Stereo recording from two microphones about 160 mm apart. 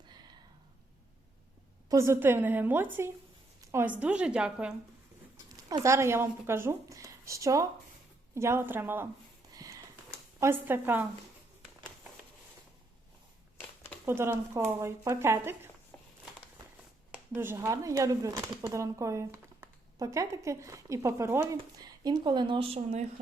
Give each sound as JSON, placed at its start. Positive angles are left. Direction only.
{"t": 1.9, "sound": "speech", "side_deg": -15}
{"t": 5.5, "sound": "speech", "side_deg": -20}
{"t": 9.5, "sound": "a sound", "side_deg": -20}
{"t": 10.4, "sound": "speech", "side_deg": -15}
{"t": 13.6, "sound": "a sound", "side_deg": 10}
{"t": 14.0, "sound": "speech", "side_deg": -15}
{"t": 17.1, "sound": "speech", "side_deg": -15}